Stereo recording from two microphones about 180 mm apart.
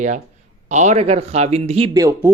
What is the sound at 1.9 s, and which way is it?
Speech, 15° right (ahead or behind).